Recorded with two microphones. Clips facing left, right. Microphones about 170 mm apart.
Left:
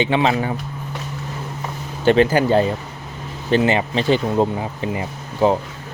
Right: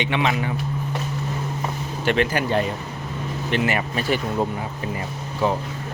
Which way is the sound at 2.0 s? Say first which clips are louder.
Left 7 dB; 25° left (ahead or behind).